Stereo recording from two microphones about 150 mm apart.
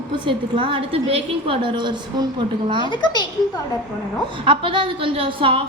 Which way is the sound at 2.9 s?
30° left (ahead or behind).